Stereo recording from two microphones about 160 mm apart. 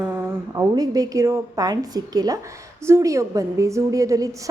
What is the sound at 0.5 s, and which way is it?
Speech, 20° right (ahead or behind).